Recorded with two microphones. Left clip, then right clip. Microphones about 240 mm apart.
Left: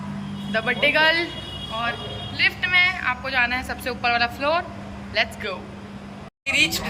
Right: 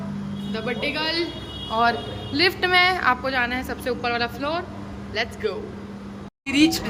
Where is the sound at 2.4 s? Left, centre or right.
Right.